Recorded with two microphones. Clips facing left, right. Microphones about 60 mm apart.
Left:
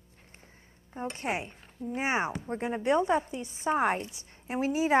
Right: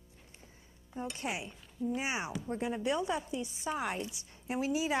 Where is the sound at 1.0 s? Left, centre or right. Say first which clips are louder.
Left 5 dB; left.